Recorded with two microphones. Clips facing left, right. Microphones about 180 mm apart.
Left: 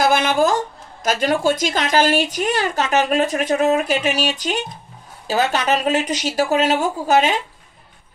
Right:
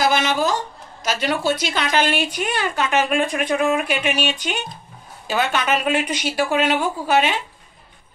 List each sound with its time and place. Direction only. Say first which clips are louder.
0.0 s a woman's voice: left 3 dB; 50° left (ahead or behind)